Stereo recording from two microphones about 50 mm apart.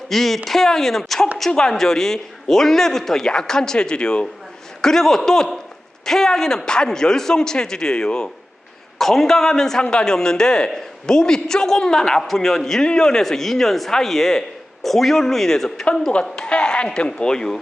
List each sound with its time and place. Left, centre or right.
0.1 s speech: centre